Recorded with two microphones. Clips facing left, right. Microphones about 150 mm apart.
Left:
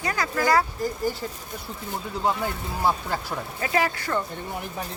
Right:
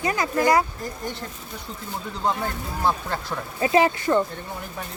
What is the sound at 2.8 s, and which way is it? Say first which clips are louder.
Speech: even; 10° left (ahead or behind).